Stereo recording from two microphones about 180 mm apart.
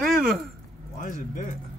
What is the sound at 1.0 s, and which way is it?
Speech, 45° left (ahead or behind).